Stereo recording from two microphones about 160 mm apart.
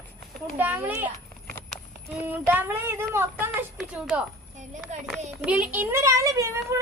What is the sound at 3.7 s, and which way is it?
Speech, 5° right (ahead or behind).